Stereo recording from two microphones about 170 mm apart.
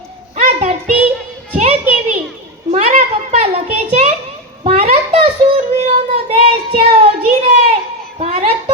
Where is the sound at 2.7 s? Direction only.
40° right (ahead or behind).